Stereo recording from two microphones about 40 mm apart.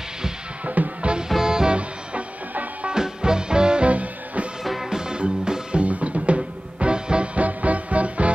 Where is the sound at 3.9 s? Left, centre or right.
Right.